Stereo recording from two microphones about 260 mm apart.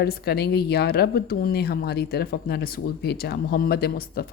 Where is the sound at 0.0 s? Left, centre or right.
Left.